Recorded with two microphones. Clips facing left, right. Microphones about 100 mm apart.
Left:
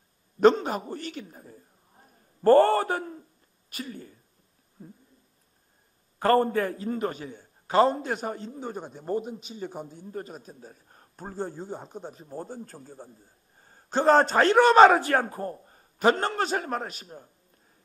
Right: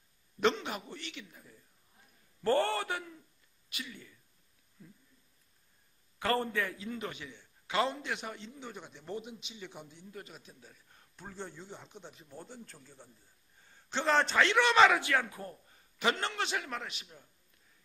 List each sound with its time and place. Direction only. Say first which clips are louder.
0.4 s a man's voice: left 11 dB; 40° left (ahead or behind)
6.1 s a man's voice: left 10 dB; 40° left (ahead or behind)